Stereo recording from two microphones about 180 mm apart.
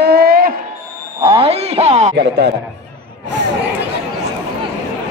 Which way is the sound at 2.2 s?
70° right (ahead or behind).